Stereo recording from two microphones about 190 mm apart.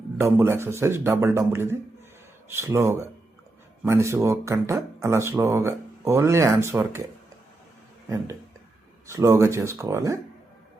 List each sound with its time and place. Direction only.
0.2 s speech: 15° right (ahead or behind)
9.0 s speech: 15° right (ahead or behind)